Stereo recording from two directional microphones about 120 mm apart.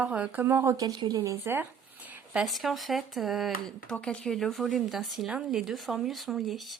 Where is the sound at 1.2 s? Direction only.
15° right (ahead or behind).